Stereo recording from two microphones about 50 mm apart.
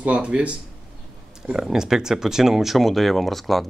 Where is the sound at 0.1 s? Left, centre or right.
Right.